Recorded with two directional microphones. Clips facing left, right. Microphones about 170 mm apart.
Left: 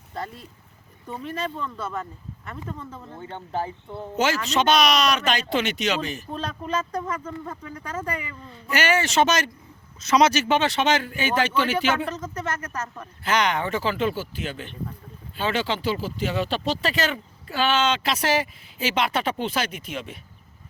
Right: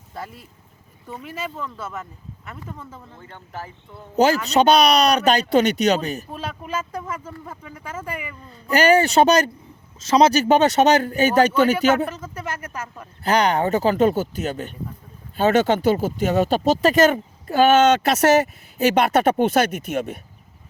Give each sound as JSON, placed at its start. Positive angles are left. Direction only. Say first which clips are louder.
{"t": 0.1, "sound": "speech", "louder": "left 1 dB", "side_deg": -5}
{"t": 3.2, "sound": "speech", "louder": "left 7 dB", "side_deg": 30}
{"t": 4.5, "sound": "speech", "louder": "right 4 dB", "side_deg": -35}
{"t": 6.3, "sound": "speech", "louder": "left 1 dB", "side_deg": -5}
{"t": 8.7, "sound": "speech", "louder": "right 7 dB", "side_deg": -35}
{"t": 12.0, "sound": "speech", "louder": "even", "side_deg": -10}
{"t": 13.2, "sound": "speech", "louder": "right 5 dB", "side_deg": -35}